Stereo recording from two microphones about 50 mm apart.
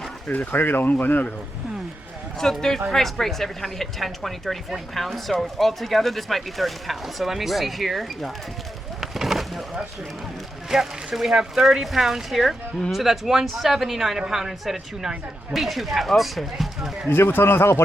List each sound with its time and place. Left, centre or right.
0.5 s speech: left
2.4 s a woman's voice: centre
9.0 s a sound: centre
10.7 s a woman's voice: centre
17.1 s a man's voice: left